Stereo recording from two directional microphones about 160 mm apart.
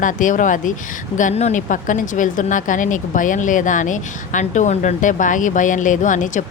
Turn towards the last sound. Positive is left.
turn(degrees=50)  # may be behind; listen again after turning